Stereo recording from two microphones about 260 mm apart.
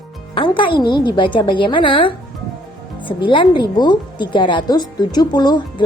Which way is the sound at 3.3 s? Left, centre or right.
Centre.